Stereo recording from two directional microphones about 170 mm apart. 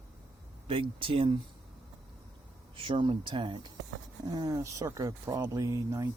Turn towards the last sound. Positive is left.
turn(degrees=-20)  # may be behind; listen again after turning